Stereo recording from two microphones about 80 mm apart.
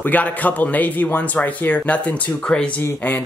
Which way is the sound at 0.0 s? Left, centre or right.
Centre.